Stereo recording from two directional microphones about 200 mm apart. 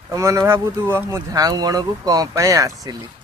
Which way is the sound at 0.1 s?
15° right (ahead or behind).